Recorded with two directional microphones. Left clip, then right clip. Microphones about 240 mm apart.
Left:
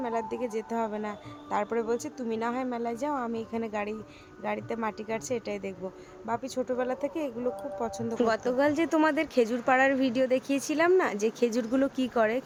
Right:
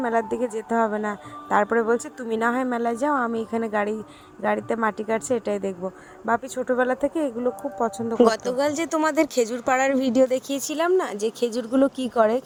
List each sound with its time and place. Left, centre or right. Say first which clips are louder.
0.0 s speech: right 8 dB; right
8.2 s speech: right 6 dB; right